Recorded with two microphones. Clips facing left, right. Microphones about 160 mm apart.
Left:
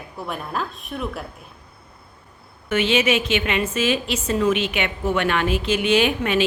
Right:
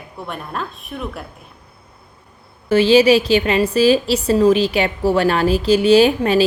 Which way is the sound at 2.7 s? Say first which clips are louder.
Right 8 dB; 35° right (ahead or behind).